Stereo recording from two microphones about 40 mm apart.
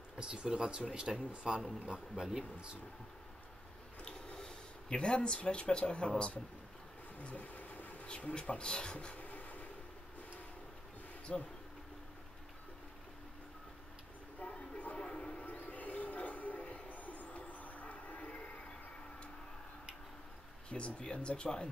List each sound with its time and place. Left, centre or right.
0.2 s speech: right
4.0 s speech: centre
7.2 s vehicle: left
8.0 s speech: left
9.2 s train: left
11.3 s speech: centre
15.0 s a sound: left
15.4 s music: left
16.9 s a sound: left
20.7 s speech: left